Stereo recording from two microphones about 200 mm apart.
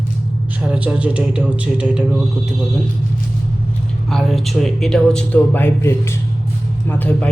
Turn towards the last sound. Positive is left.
turn(degrees=5)  # may be behind; listen again after turning